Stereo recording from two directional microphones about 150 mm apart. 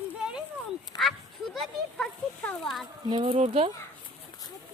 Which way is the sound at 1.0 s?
Centre (ahead or behind).